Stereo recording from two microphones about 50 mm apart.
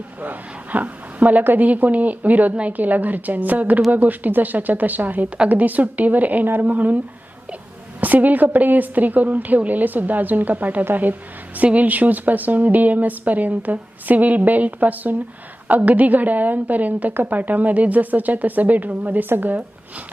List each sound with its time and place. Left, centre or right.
0.2 s a woman's voice: right
8.0 s a woman's voice: right